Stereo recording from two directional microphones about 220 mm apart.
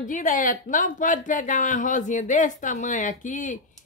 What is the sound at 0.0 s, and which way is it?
Speech, 35° left (ahead or behind).